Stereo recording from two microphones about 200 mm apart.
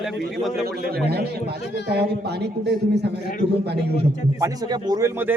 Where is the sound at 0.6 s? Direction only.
50° right (ahead or behind).